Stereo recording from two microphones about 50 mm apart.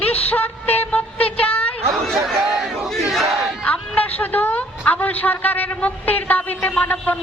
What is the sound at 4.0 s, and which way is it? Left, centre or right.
A man's voice, left.